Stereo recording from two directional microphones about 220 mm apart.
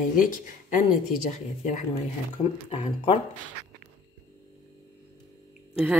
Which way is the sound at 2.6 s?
30° left (ahead or behind).